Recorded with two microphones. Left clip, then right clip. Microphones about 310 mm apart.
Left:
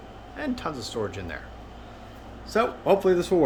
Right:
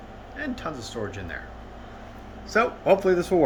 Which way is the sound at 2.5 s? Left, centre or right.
Centre.